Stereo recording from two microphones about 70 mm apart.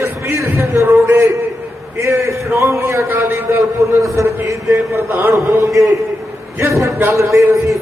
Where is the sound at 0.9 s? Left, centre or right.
Right.